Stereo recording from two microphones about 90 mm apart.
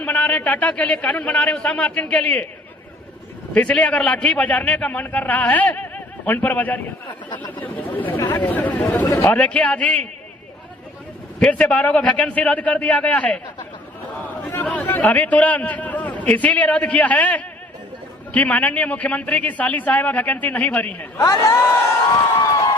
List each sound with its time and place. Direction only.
0.0 s a man's voice: 15° left (ahead or behind)
3.5 s a man's voice: 15° left (ahead or behind)
11.3 s a man's voice: 15° left (ahead or behind)
14.6 s a man's voice: 15° left (ahead or behind)
21.2 s speech: 40° left (ahead or behind)